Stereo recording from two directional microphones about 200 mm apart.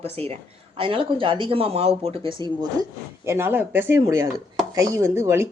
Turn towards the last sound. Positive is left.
turn(degrees=-15)  # may be behind; listen again after turning